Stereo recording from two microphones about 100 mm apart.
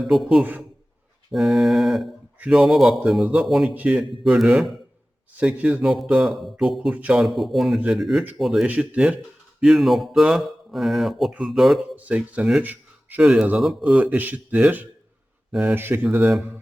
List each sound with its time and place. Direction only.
0.1 s speech: centre (ahead or behind)
5.4 s speech: 15° right (ahead or behind)
5.8 s speech: centre (ahead or behind)
6.9 s speech: 15° right (ahead or behind)
7.2 s speech: centre (ahead or behind)
8.6 s speech: 15° right (ahead or behind)
11.9 s speech: 15° right (ahead or behind)
13.2 s speech: 5° right (ahead or behind)
13.9 s speech: 15° right (ahead or behind)